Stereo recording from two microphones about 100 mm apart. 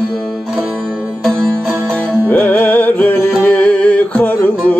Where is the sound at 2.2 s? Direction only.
15° left (ahead or behind).